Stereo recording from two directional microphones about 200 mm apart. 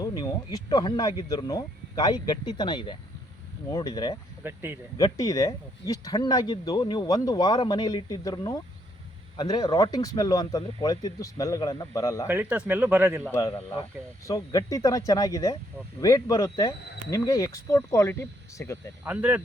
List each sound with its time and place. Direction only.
0.0 s speech: 20° left (ahead or behind)
4.4 s speech: 10° right (ahead or behind)
4.9 s speech: 15° left (ahead or behind)
12.3 s speech: 10° right (ahead or behind)
13.3 s speech: 15° left (ahead or behind)
19.0 s speech: 10° right (ahead or behind)